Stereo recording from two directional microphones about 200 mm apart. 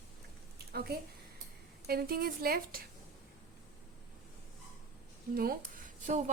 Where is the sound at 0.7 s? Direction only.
55° right (ahead or behind).